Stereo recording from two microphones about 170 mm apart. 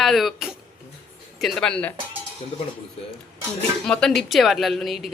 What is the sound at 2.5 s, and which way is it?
Cutlery, 30° left (ahead or behind).